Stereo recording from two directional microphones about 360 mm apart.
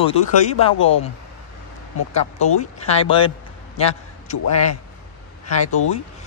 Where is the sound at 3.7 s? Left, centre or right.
Centre.